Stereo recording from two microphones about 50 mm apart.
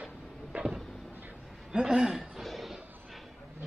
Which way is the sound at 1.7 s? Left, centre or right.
Centre.